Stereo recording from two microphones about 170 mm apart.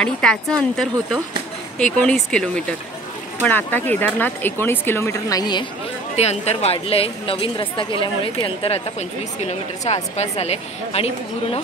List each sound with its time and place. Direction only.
0.0 s speech: 5° left (ahead or behind); by 5.7 s 25° left (ahead or behind)
6.1 s a woman's voice: 40° left (ahead or behind)